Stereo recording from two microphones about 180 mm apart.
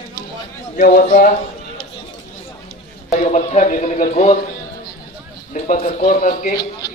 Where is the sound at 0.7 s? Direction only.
50° left (ahead or behind).